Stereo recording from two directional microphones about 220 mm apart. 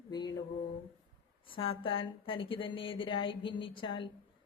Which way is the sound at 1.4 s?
25° left (ahead or behind).